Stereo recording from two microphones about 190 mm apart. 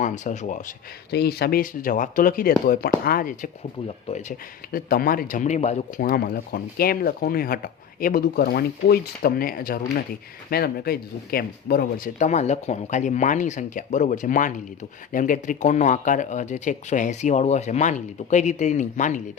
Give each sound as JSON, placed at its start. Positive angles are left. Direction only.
{"t": 0.0, "sound": "speech", "side_deg": 40}
{"t": 1.1, "sound": "speech", "side_deg": 55}
{"t": 4.7, "sound": "speech", "side_deg": 50}
{"t": 6.0, "sound": "speech", "side_deg": 50}